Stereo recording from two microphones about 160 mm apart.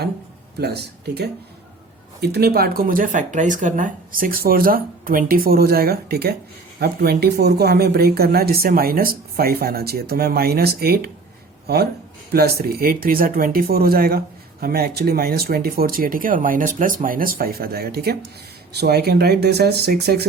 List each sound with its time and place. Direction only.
0.6 s speech: 90° right